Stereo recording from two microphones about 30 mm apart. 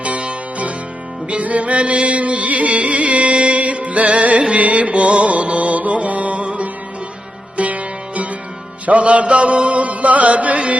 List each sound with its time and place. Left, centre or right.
0.0 s music: right
1.4 s music: right
8.9 s mantra: right